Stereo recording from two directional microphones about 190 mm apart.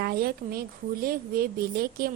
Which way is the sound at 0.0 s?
50° right (ahead or behind).